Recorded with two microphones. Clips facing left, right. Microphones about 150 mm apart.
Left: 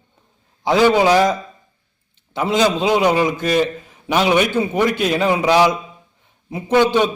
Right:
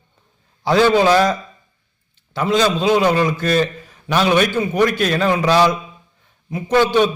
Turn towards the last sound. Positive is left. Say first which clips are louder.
# even
turn(degrees=15)  # may be behind; listen again after turning